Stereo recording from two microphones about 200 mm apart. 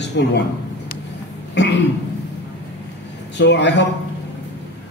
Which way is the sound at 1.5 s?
60° left (ahead or behind).